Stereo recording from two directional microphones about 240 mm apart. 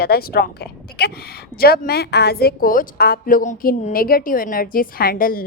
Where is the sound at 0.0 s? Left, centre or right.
Left.